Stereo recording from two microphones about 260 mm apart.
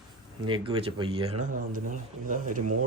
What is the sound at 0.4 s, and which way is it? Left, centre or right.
Speech, centre.